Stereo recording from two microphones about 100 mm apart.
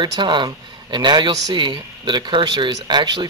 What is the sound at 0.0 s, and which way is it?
Speech, 50° right (ahead or behind).